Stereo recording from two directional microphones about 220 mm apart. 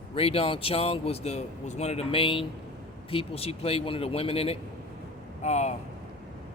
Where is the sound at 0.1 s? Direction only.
25° left (ahead or behind).